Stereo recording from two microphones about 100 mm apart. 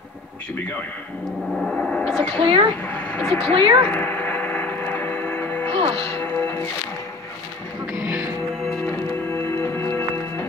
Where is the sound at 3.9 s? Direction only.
20° left (ahead or behind).